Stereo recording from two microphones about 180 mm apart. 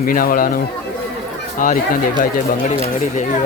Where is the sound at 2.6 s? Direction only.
40° left (ahead or behind).